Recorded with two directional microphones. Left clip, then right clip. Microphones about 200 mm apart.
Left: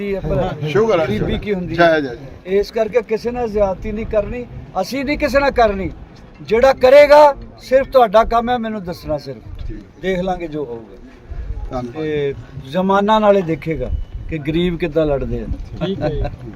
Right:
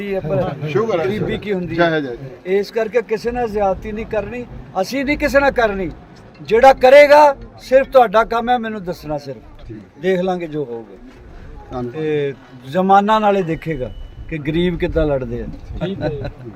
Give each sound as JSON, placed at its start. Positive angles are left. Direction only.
{"t": 0.0, "sound": "speech", "side_deg": 0}
{"t": 0.4, "sound": "speech", "side_deg": 50}
{"t": 1.1, "sound": "speech", "side_deg": 0}
{"t": 1.7, "sound": "speech", "side_deg": 50}
{"t": 2.4, "sound": "speech", "side_deg": 0}
{"t": 11.7, "sound": "speech", "side_deg": 45}
{"t": 12.0, "sound": "a man's voice", "side_deg": 5}